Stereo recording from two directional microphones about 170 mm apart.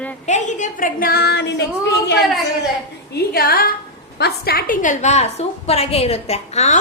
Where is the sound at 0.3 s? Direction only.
45° left (ahead or behind); by 2.1 s 90° left.